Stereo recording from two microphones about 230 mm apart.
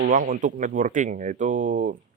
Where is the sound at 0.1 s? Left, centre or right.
Right.